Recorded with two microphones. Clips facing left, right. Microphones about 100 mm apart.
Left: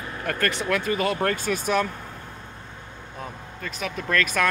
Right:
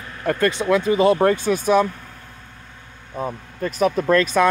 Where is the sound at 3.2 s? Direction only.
40° right (ahead or behind).